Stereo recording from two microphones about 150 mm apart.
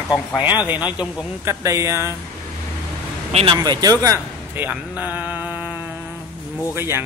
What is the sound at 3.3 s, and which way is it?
Speech, 40° right (ahead or behind).